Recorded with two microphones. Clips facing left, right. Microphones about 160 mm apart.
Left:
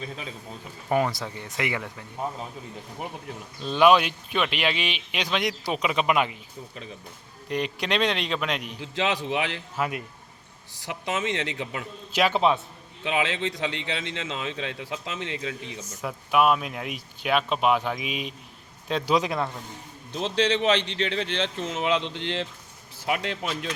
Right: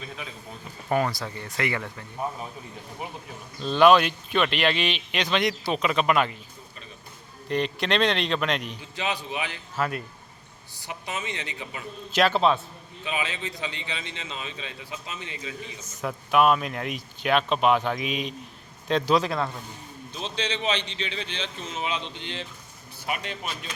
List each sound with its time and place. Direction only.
0.9 s speech: 15° left (ahead or behind)
3.6 s speech: 10° left (ahead or behind)
7.4 s speech: 10° left (ahead or behind)
8.8 s a man's voice: 90° left
9.7 s speech: 15° left (ahead or behind)
10.8 s a man's voice: 90° left
12.1 s speech: 15° left (ahead or behind)
13.1 s a man's voice: 85° left
15.8 s speech: 10° left (ahead or behind)
20.1 s a man's voice: 75° left (ahead or behind); by 23.6 s 90° left